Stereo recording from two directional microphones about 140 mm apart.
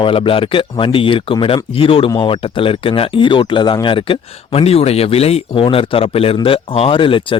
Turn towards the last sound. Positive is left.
turn(degrees=35)  # may be behind; listen again after turning